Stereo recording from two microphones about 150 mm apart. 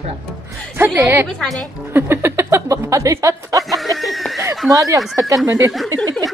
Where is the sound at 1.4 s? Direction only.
5° left (ahead or behind).